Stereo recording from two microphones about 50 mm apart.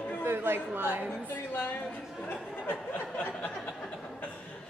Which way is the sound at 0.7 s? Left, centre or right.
Right.